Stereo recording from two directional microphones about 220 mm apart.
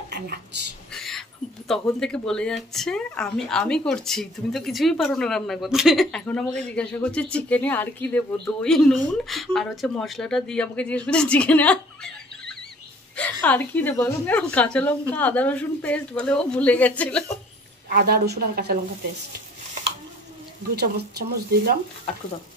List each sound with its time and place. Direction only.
0.1 s a woman's voice: 50° right (ahead or behind)
0.9 s a sound: centre (ahead or behind)
2.0 s speech: 5° left (ahead or behind)
13.1 s a woman's voice: 5° left (ahead or behind)
17.8 s speech: 45° right (ahead or behind)
20.7 s speech: 45° right (ahead or behind)